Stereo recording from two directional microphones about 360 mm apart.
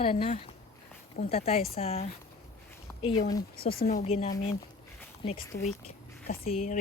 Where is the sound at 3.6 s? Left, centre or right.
Left.